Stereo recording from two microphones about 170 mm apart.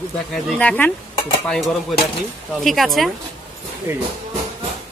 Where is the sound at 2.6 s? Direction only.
Centre (ahead or behind).